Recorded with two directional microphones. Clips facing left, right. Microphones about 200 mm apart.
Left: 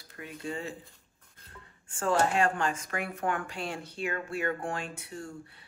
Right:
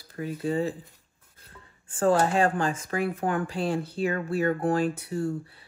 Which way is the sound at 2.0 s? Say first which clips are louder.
Right 5 dB; 35° right (ahead or behind).